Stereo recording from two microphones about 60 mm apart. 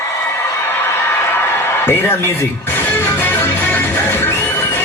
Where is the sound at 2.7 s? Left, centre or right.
Left.